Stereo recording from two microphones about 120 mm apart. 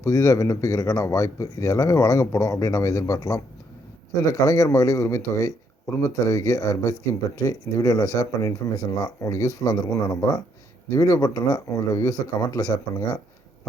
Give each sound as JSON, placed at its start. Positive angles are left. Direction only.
{"t": 0.0, "sound": "speech", "side_deg": 30}